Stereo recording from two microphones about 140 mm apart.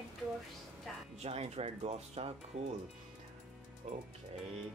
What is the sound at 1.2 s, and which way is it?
Speech, 50° right (ahead or behind).